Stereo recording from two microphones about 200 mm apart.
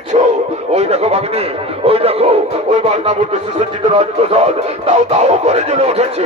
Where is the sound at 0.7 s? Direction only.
30° right (ahead or behind).